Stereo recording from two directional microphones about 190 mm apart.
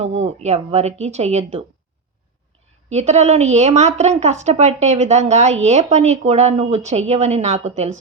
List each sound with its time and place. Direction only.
0.0 s a woman's voice: 35° right (ahead or behind)
2.9 s a woman's voice: 35° right (ahead or behind)